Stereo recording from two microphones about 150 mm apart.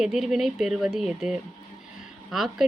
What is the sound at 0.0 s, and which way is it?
A woman's voice, 5° right (ahead or behind).